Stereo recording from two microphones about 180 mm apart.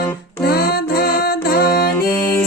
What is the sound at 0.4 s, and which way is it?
Music, 60° left (ahead or behind).